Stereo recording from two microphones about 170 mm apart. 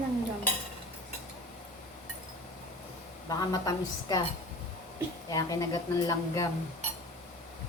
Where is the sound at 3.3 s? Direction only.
20° left (ahead or behind).